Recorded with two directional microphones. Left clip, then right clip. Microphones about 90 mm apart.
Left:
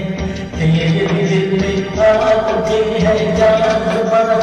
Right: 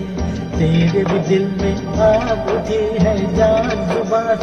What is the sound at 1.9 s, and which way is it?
Music, 25° left (ahead or behind).